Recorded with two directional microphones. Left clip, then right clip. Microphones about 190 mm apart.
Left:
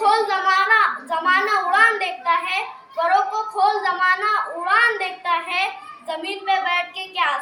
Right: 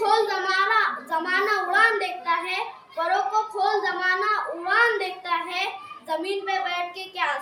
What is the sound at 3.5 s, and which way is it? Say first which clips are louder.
Child singing: left 5 dB; 15° right (ahead or behind).